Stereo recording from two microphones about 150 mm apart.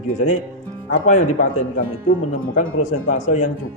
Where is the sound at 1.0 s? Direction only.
55° left (ahead or behind).